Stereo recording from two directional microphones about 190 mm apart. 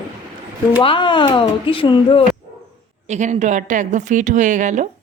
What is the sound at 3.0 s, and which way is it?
A woman's voice, 35° right (ahead or behind).